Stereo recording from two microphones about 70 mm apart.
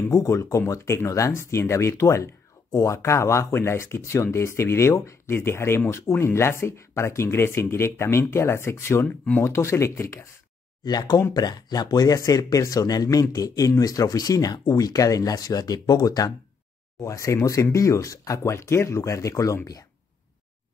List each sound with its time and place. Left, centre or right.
0.1 s speech: left
9.0 s speech: centre
9.4 s speech: left
10.8 s speech: left
17.0 s speech: left